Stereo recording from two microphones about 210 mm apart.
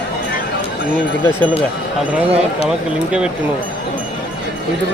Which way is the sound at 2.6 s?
5° right (ahead or behind).